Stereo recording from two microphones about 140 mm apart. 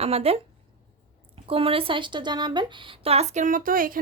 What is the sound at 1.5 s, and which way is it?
A woman's voice, 40° right (ahead or behind).